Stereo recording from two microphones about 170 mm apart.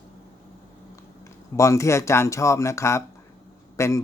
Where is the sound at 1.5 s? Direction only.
15° left (ahead or behind).